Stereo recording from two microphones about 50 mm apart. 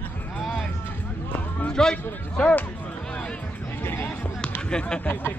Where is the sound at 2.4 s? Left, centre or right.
Left.